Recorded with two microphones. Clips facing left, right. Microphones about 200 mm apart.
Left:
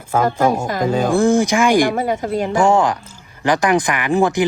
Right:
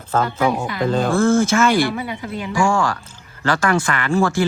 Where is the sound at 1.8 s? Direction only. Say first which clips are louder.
Left 5 dB; 45° left (ahead or behind).